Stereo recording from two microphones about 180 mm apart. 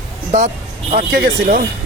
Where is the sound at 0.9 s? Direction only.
50° right (ahead or behind).